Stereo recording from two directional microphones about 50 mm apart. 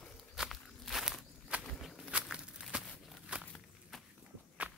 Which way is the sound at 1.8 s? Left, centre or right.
Centre.